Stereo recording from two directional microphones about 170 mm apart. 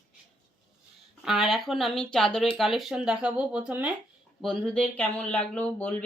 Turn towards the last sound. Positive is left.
turn(degrees=10)  # may be behind; listen again after turning